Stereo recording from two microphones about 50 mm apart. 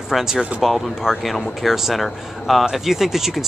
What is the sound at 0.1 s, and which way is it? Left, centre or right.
Speech, centre.